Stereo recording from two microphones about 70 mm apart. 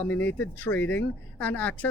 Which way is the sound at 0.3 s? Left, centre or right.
Left.